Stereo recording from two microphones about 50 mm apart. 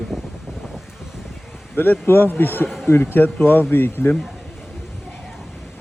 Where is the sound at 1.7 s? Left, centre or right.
Left.